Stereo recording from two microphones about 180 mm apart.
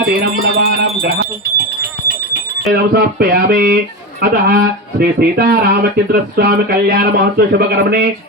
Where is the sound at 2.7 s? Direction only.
60° right (ahead or behind).